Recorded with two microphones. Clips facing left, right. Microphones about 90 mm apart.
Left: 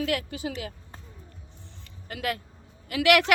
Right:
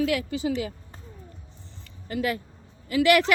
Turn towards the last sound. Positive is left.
turn(degrees=65)  # may be behind; listen again after turning